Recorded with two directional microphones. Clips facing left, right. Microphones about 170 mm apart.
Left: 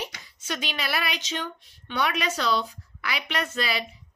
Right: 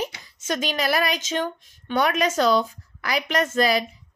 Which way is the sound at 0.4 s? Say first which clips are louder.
Right 7 dB; 45° right (ahead or behind).